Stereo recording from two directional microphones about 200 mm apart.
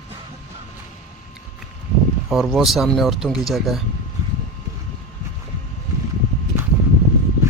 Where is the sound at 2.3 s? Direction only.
Centre (ahead or behind).